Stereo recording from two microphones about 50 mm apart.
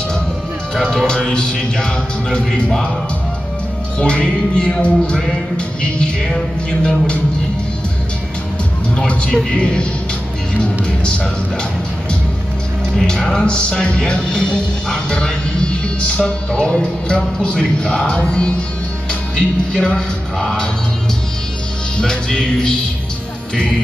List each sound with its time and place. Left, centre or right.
0.7 s speech: centre
4.0 s music: left
6.3 s speech: centre
8.9 s speech: left
9.5 s music: centre
12.9 s music: centre
19.3 s speech: centre
21.9 s speech: centre